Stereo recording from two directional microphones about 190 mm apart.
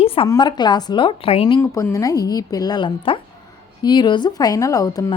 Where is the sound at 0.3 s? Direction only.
20° left (ahead or behind).